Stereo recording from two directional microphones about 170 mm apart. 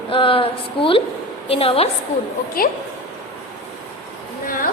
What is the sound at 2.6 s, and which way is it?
Speech, 60° left (ahead or behind).